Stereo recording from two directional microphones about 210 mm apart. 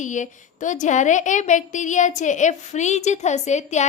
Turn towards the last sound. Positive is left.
turn(degrees=35)  # may be behind; listen again after turning